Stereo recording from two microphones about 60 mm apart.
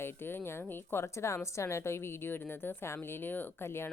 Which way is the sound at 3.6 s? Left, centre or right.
Left.